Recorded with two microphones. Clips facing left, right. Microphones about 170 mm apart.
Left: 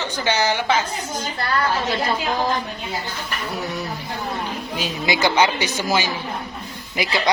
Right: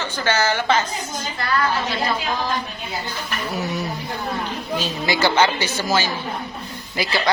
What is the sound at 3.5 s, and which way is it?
Speech, centre (ahead or behind).